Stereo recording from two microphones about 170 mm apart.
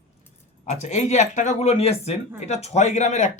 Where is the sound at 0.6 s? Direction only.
45° left (ahead or behind).